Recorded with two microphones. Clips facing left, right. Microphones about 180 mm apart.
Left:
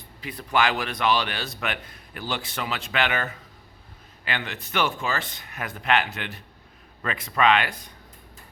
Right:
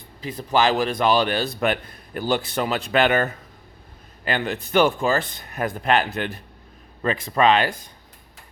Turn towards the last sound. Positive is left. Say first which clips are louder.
# right 3 dB
turn(degrees=-35)  # may be behind; listen again after turning